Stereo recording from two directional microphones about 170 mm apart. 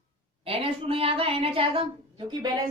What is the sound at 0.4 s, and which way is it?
A woman's voice, 35° right (ahead or behind).